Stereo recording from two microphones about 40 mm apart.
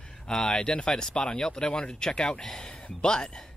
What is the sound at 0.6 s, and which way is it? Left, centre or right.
Speech, left.